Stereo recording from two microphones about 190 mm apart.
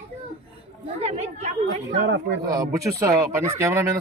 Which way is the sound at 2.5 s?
20° right (ahead or behind).